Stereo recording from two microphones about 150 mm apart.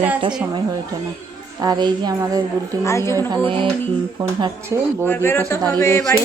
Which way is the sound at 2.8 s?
20° left (ahead or behind).